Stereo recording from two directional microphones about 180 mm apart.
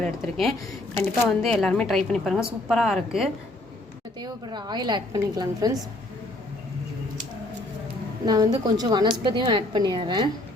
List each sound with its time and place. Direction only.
0.0 s a woman's voice: centre (ahead or behind)
4.2 s a woman's voice: 25° right (ahead or behind)
8.2 s a woman's voice: 20° right (ahead or behind)